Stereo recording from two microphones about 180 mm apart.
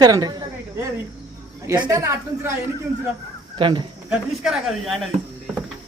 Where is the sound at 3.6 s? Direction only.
25° right (ahead or behind).